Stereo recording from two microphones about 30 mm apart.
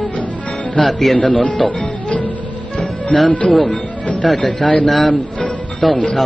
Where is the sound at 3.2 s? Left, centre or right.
Left.